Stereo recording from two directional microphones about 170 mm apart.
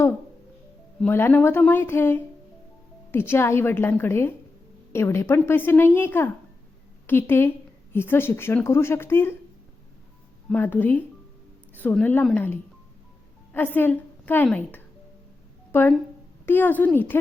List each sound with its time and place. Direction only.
0.9 s speech: 10° left (ahead or behind)
10.5 s a woman's voice: 10° left (ahead or behind)